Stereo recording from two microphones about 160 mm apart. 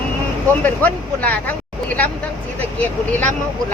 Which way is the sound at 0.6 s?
10° left (ahead or behind).